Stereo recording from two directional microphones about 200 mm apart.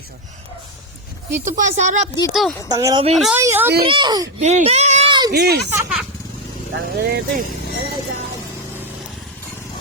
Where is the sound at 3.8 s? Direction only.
25° right (ahead or behind).